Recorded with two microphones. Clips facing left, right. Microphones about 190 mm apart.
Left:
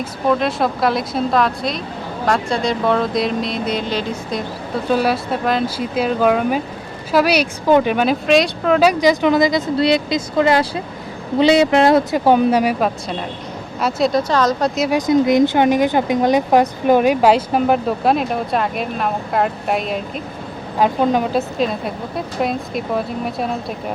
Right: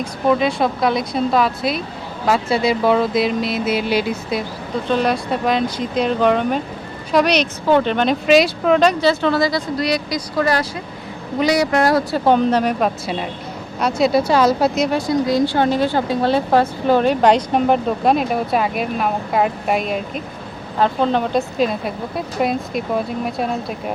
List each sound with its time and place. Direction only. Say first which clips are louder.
0.0 s speech: right 1 dB; centre (ahead or behind)
4.9 s speech: left 1 dB; 5° left (ahead or behind)
8.3 s speech: right 3 dB; centre (ahead or behind); by 12.2 s 20° left (ahead or behind)
12.2 s speech: left 1 dB; 10° left (ahead or behind)
13.8 s speech: right 1 dB; 5° right (ahead or behind)
14.9 s speech: left 4 dB; 20° left (ahead or behind); by 20.2 s centre (ahead or behind)
20.7 s speech: left 1 dB; 10° left (ahead or behind)
21.6 s speech: right 1 dB; centre (ahead or behind)